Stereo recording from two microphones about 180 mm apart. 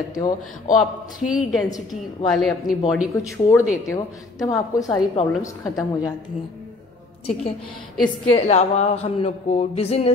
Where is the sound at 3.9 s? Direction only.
15° left (ahead or behind).